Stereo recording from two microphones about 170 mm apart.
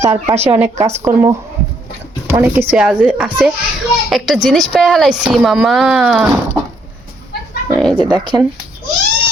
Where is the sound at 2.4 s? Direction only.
10° right (ahead or behind).